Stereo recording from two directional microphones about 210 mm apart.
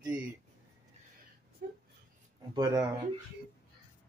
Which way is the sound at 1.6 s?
40° right (ahead or behind).